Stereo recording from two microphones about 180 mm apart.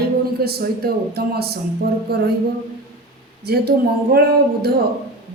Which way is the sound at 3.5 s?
60° right (ahead or behind).